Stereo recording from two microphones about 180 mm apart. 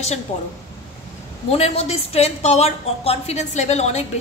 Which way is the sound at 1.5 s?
35° left (ahead or behind).